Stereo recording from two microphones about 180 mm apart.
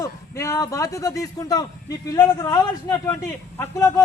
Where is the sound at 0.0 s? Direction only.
15° left (ahead or behind).